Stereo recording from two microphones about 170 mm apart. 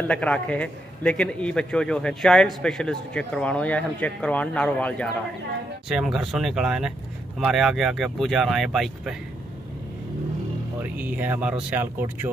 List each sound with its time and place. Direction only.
0.1 s a man's voice: 5° left (ahead or behind)
10.8 s speech: 10° right (ahead or behind)